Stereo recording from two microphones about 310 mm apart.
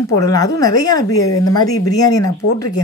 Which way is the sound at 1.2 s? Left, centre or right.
Left.